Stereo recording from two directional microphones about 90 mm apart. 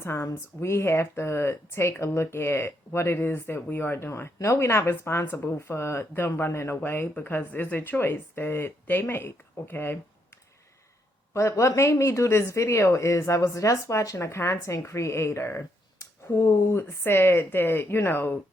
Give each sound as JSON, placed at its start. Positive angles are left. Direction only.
{"t": 0.0, "sound": "speech", "side_deg": 30}
{"t": 11.3, "sound": "speech", "side_deg": 35}